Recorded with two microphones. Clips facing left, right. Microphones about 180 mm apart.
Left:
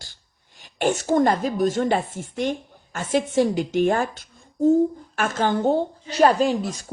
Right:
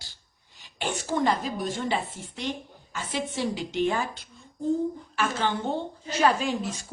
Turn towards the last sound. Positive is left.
turn(degrees=40)  # may be behind; listen again after turning